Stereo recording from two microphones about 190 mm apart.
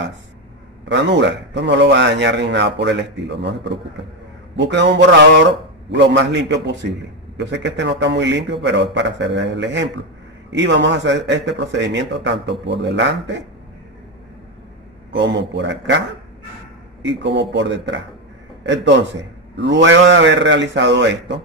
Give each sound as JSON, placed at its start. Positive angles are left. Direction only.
{"t": 0.8, "sound": "a man's voice", "side_deg": -65}
{"t": 15.1, "sound": "a man's voice", "side_deg": -65}
{"t": 17.0, "sound": "a man's voice", "side_deg": -65}